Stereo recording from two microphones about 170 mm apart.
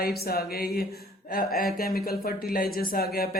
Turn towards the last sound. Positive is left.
turn(degrees=60)  # may be behind; listen again after turning